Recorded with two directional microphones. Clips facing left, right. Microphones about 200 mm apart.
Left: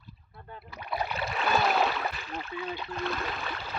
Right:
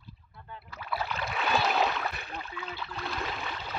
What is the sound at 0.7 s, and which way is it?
Speech, 20° left (ahead or behind).